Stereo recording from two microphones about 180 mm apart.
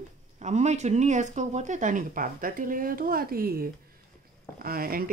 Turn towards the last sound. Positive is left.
turn(degrees=-55)  # may be behind; listen again after turning